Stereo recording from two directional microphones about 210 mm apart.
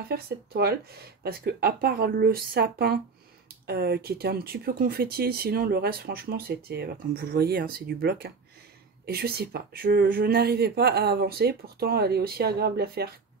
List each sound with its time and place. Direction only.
0.1 s speech: 50° right (ahead or behind)